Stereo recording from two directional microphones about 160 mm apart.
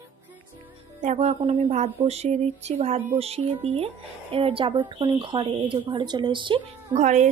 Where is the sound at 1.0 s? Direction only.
40° right (ahead or behind).